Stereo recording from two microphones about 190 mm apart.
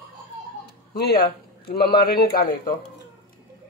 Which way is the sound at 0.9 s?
60° left (ahead or behind).